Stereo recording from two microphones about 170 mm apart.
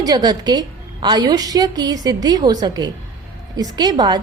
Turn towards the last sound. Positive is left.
turn(degrees=-25)  # may be behind; listen again after turning